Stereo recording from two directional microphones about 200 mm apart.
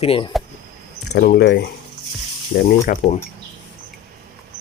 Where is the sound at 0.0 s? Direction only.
30° left (ahead or behind).